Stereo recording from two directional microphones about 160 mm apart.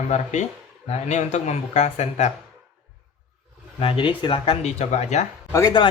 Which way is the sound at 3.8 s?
35° left (ahead or behind).